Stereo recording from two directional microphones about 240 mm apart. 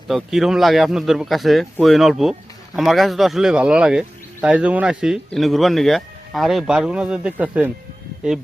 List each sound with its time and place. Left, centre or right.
0.1 s speech: centre